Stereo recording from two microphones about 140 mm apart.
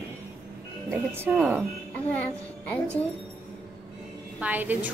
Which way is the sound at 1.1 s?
15° right (ahead or behind).